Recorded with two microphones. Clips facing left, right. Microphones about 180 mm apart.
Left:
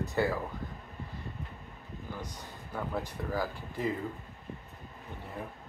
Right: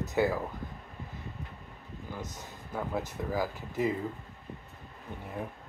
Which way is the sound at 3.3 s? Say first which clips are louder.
Right 1 dB; 10° right (ahead or behind).